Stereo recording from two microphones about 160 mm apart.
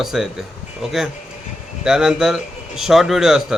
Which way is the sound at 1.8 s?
5° right (ahead or behind).